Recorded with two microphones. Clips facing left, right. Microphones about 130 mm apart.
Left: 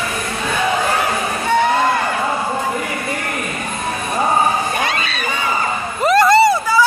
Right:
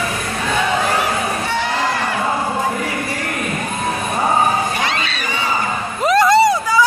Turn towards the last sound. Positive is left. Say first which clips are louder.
# left 1 dB
turn(degrees=0)  # may be behind; listen again after turning